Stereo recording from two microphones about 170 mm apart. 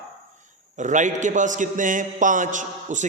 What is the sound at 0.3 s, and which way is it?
A man's voice, 45° right (ahead or behind).